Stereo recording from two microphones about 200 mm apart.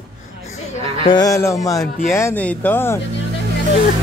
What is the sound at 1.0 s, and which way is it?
A man's voice, 20° left (ahead or behind).